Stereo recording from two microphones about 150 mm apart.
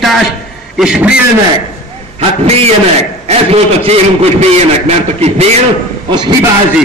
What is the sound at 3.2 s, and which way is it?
A man's voice, 45° right (ahead or behind).